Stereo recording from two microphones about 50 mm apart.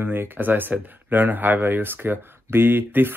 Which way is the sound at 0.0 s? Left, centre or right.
Right.